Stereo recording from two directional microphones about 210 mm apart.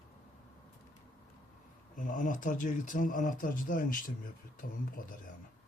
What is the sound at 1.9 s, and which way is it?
Speech, 40° left (ahead or behind).